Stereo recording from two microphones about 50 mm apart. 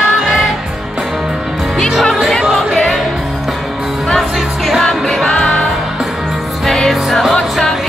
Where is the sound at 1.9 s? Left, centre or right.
Centre.